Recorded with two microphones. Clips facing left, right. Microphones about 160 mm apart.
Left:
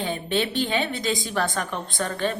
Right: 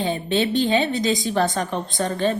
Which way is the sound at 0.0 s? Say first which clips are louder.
Right 4 dB; 20° right (ahead or behind).